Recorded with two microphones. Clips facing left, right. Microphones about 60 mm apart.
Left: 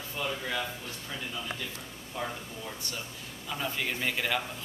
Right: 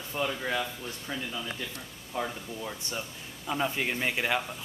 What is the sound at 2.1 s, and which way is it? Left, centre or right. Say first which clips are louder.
Speech: right 3 dB; right.